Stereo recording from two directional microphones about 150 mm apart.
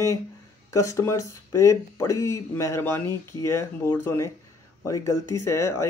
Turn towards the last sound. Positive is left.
turn(degrees=20)  # may be behind; listen again after turning